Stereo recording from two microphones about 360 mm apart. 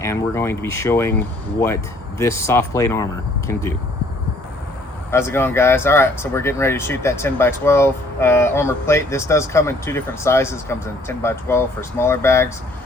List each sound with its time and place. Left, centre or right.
0.0 s speech: centre
5.1 s speech: centre